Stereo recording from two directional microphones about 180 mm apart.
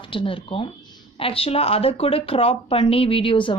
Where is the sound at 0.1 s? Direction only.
30° left (ahead or behind).